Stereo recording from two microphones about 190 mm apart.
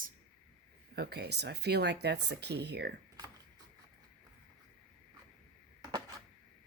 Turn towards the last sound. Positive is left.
turn(degrees=-20)  # may be behind; listen again after turning